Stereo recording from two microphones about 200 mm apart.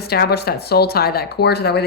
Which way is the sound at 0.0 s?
50° left (ahead or behind).